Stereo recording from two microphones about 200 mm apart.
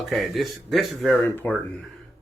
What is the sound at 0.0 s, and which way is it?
Speech, centre (ahead or behind).